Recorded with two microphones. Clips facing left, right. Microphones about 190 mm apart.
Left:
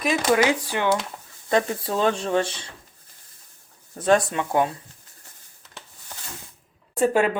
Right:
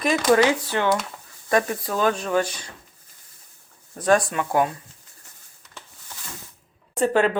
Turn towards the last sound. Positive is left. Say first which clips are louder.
# even
turn(degrees=10)  # may be behind; listen again after turning